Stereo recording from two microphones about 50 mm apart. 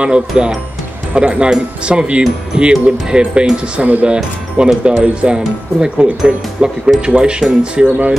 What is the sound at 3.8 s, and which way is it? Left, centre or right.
Speech, right.